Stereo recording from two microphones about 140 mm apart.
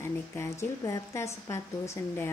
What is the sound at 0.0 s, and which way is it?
A woman's voice, 20° left (ahead or behind).